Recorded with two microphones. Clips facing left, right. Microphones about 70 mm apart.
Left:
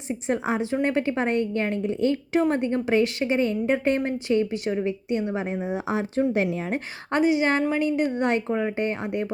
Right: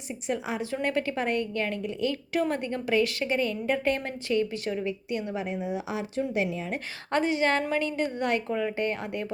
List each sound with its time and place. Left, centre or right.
0.1 s a woman's voice: left
7.1 s a woman's voice: centre